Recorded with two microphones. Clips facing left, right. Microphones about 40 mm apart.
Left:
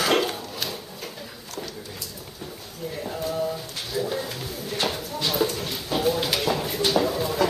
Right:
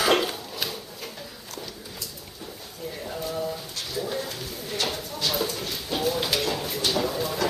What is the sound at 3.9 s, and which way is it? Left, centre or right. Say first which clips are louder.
Bird: left 3 dB; centre.